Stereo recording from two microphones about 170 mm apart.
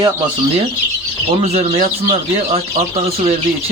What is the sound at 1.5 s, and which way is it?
Speech, 35° right (ahead or behind).